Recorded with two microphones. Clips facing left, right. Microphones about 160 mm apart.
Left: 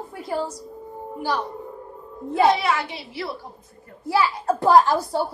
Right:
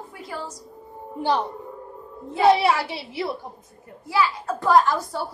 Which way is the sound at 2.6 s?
35° right (ahead or behind).